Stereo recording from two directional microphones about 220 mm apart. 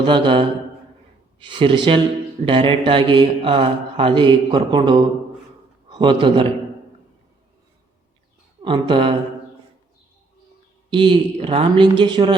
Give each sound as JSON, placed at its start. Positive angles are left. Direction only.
{"t": 0.0, "sound": "speech", "side_deg": -20}
{"t": 8.6, "sound": "speech", "side_deg": -20}
{"t": 10.8, "sound": "speech", "side_deg": -20}